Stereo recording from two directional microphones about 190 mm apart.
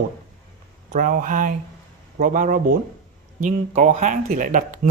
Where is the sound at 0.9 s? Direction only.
45° right (ahead or behind).